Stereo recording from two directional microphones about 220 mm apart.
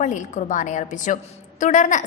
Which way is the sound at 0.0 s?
35° left (ahead or behind).